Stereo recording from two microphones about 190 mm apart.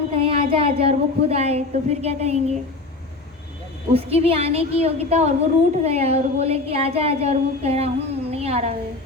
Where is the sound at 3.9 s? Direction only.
30° right (ahead or behind).